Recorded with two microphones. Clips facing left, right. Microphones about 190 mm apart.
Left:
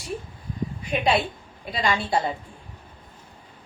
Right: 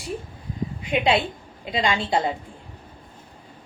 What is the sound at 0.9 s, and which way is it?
A woman's voice, 20° right (ahead or behind).